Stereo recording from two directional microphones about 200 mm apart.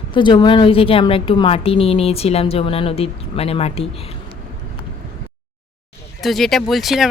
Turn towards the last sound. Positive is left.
turn(degrees=0)  # may be behind; listen again after turning